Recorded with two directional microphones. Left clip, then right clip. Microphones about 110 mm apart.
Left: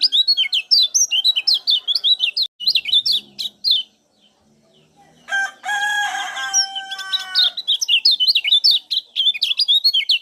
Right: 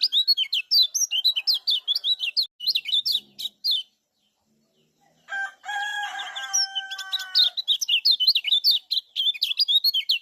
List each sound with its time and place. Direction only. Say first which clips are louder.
0.0 s bird: left 6 dB; 15° left (ahead or behind)
5.2 s crowing: left 9 dB; 5° left (ahead or behind)
7.8 s bird: left 7 dB; 15° left (ahead or behind)